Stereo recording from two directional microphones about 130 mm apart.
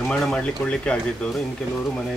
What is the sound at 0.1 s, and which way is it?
Speech, 5° left (ahead or behind).